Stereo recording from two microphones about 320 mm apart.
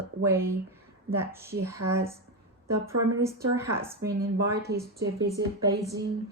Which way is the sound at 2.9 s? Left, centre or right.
Right.